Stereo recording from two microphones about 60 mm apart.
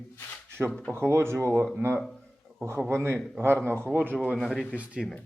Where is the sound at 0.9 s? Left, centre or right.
Right.